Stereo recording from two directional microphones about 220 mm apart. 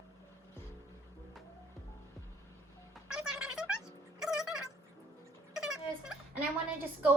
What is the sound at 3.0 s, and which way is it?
Music, 5° right (ahead or behind).